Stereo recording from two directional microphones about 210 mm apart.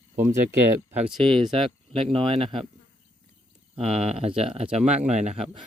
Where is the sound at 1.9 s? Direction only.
25° right (ahead or behind).